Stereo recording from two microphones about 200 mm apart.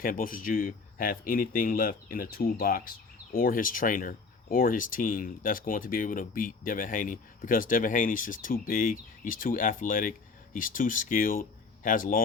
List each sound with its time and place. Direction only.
0.0 s speech: 45° left (ahead or behind)